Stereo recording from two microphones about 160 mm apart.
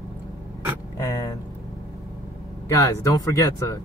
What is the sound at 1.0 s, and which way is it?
Speech, 20° left (ahead or behind).